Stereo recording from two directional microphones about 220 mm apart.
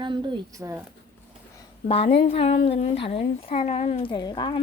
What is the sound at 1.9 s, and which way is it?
Speech, 25° left (ahead or behind).